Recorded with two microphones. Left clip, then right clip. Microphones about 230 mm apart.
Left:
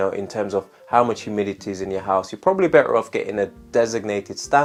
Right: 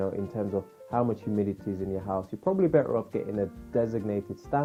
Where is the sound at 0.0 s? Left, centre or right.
Centre.